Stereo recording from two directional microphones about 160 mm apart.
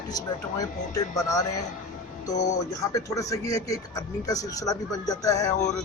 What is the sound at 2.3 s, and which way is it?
Speech, 45° left (ahead or behind).